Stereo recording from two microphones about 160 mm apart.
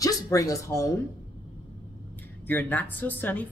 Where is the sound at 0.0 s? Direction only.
20° left (ahead or behind).